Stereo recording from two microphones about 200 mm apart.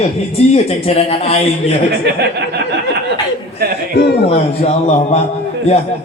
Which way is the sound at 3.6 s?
50° right (ahead or behind).